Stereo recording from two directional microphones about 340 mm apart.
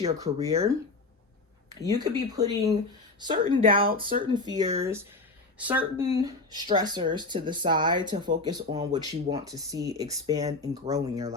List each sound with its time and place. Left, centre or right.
0.0 s speech: centre
1.7 s speech: centre
3.3 s speech: right
4.2 s speech: centre